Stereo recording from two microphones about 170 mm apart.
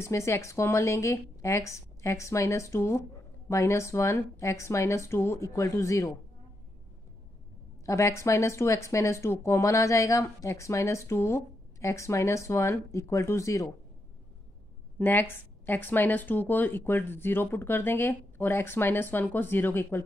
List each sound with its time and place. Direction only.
0.0 s speech: 15° left (ahead or behind)
7.8 s speech: 15° left (ahead or behind)
15.0 s speech: 10° left (ahead or behind)